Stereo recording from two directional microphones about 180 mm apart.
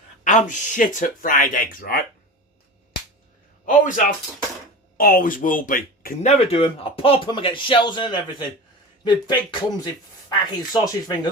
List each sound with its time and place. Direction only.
0.3 s speech: 45° left (ahead or behind)
3.7 s speech: 45° left (ahead or behind)
6.5 s speech: 35° left (ahead or behind)